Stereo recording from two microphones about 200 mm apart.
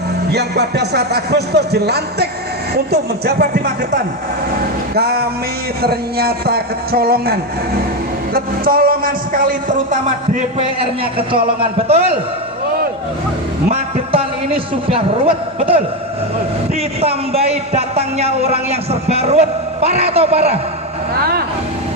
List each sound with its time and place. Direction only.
0.3 s a man's voice: 55° right (ahead or behind); by 12.2 s 30° right (ahead or behind)
13.7 s a man's voice: 30° right (ahead or behind)
17.0 s a man's voice: 30° right (ahead or behind)